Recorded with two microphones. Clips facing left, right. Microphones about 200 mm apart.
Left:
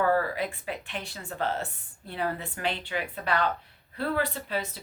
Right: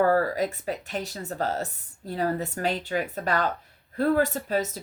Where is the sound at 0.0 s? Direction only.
40° right (ahead or behind).